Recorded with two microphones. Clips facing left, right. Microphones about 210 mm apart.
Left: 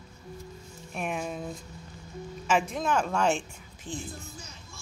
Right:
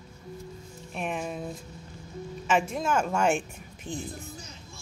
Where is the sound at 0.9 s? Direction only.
Centre (ahead or behind).